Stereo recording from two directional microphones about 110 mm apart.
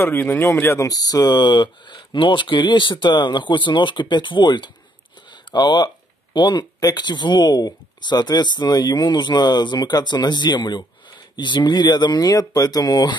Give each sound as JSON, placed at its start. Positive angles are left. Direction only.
{"t": 0.0, "sound": "speech", "side_deg": 20}